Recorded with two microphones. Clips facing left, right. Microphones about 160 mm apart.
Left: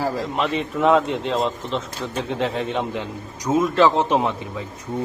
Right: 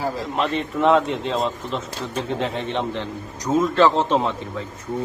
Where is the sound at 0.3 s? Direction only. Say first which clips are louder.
Even; centre (ahead or behind).